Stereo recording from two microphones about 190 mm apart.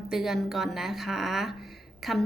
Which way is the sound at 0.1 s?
Centre (ahead or behind).